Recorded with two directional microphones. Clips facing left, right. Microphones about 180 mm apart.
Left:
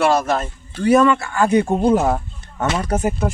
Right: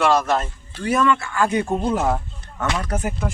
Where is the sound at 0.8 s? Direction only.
35° left (ahead or behind).